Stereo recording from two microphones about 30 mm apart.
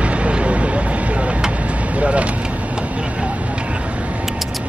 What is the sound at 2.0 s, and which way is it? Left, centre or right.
Vehicle, right.